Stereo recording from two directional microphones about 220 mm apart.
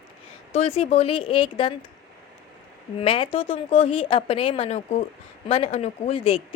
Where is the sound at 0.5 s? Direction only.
25° left (ahead or behind).